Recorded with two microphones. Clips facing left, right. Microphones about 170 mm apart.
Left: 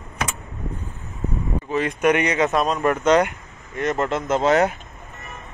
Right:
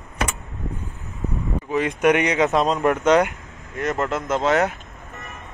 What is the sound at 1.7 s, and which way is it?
Speech, 15° right (ahead or behind).